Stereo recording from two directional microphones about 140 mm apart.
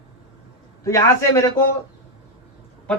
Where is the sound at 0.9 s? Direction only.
20° left (ahead or behind).